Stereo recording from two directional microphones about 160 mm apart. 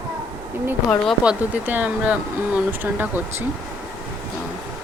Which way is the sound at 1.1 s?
10° right (ahead or behind).